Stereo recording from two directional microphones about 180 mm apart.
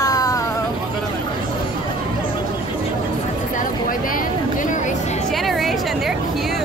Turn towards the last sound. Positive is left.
turn(degrees=0)  # may be behind; listen again after turning